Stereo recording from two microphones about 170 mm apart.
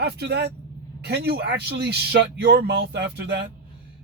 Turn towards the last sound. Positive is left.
turn(degrees=-80)